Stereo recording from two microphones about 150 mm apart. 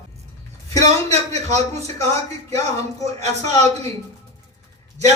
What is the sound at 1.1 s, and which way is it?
A man's voice, 45° right (ahead or behind).